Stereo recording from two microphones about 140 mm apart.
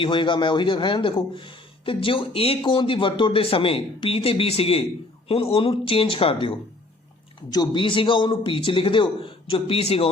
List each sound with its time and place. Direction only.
0.0 s speech: 35° left (ahead or behind)